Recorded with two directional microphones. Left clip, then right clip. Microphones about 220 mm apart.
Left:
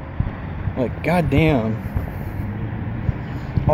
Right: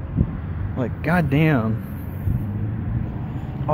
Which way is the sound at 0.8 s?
15° right (ahead or behind).